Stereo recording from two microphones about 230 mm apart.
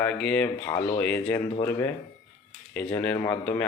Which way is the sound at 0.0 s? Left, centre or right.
Centre.